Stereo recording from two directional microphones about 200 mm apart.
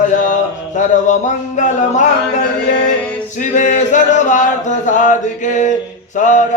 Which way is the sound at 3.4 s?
40° left (ahead or behind).